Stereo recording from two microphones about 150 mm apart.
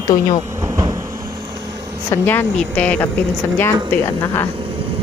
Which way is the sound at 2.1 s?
15° left (ahead or behind).